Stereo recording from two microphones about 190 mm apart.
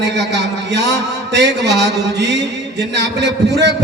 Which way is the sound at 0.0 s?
65° right (ahead or behind).